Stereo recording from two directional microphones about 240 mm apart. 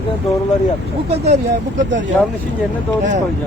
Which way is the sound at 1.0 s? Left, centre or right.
Right.